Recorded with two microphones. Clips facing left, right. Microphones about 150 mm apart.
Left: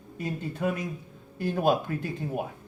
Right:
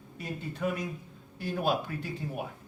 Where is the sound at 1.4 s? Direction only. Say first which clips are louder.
Left 5 dB; 50° left (ahead or behind).